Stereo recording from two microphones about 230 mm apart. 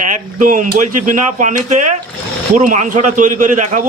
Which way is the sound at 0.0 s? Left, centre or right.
Right.